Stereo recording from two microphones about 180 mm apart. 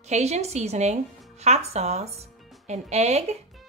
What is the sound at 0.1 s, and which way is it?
A woman's voice, 35° right (ahead or behind).